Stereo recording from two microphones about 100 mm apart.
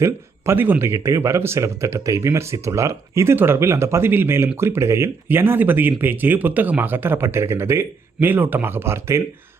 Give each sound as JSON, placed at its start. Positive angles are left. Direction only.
{"t": 0.0, "sound": "speech", "side_deg": -25}